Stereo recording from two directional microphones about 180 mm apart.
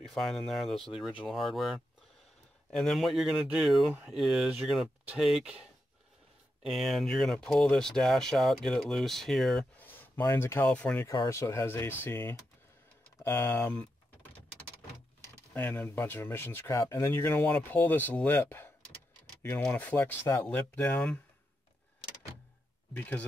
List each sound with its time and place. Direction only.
0.0 s speech: centre (ahead or behind)
11.1 s speech: 15° left (ahead or behind)
13.2 s typing: 15° left (ahead or behind)
15.5 s speech: 10° left (ahead or behind)
22.9 s speech: 10° left (ahead or behind)